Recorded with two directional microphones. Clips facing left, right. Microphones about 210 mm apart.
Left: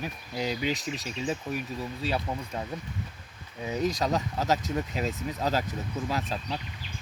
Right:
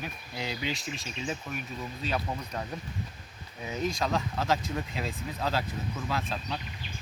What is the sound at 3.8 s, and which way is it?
Speech, 40° left (ahead or behind).